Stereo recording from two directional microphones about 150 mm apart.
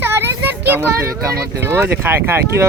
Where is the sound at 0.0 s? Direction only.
15° right (ahead or behind).